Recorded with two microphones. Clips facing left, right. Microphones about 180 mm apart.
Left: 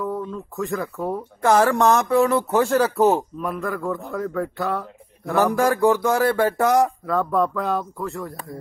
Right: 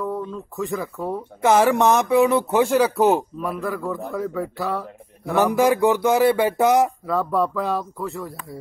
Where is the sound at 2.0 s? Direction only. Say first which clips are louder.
Right 1 dB; 15° right (ahead or behind).